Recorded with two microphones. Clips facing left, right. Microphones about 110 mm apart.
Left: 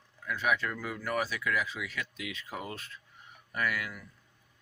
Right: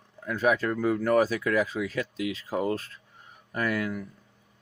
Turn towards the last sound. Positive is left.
turn(degrees=-35)  # may be behind; listen again after turning